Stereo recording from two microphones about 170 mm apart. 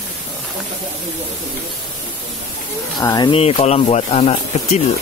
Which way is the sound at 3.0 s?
20° left (ahead or behind).